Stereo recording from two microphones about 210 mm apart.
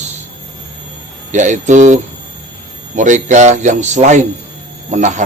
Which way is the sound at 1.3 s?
35° right (ahead or behind).